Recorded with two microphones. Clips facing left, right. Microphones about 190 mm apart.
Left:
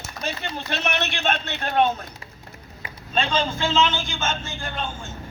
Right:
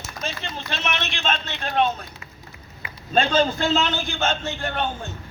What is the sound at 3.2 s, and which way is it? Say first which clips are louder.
Speech: right 4 dB; 40° right (ahead or behind).